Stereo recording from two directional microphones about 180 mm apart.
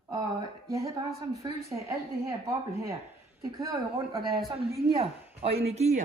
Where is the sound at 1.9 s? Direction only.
15° right (ahead or behind).